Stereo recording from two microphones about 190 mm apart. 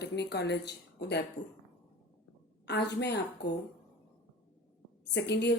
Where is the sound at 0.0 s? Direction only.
65° left (ahead or behind).